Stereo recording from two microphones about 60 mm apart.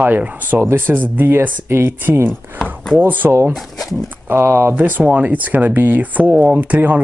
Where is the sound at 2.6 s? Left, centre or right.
Centre.